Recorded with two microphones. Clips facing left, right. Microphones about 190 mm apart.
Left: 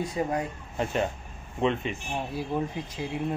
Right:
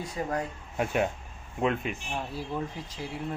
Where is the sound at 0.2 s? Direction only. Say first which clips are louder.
Left 3 dB; 20° left (ahead or behind).